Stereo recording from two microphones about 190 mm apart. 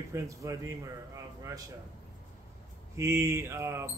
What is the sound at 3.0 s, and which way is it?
Speech, 15° right (ahead or behind).